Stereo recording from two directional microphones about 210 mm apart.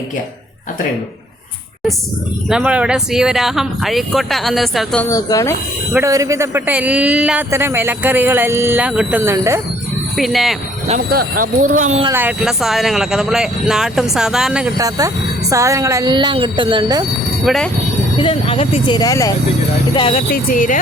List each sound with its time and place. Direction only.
2.5 s speech: 5° right (ahead or behind)
5.0 s speech: 15° left (ahead or behind)
5.9 s a man's voice: 15° right (ahead or behind)
10.2 s speech: centre (ahead or behind)
10.8 s speech: 40° right (ahead or behind)
12.0 s speech: 10° right (ahead or behind)
14.8 s a man's voice: 15° right (ahead or behind)
17.4 s speech: centre (ahead or behind)
18.2 s speech: 25° left (ahead or behind)
20.3 s speech: 40° left (ahead or behind)